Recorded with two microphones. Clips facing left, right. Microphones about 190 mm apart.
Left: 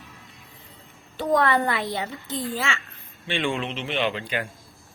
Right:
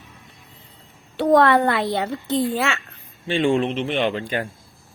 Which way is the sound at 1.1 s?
65° right (ahead or behind).